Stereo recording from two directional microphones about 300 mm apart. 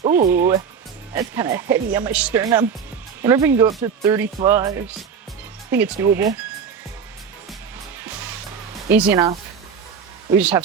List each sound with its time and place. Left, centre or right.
0.0 s speech: right
0.3 s speech: centre
8.9 s speech: centre
10.3 s speech: centre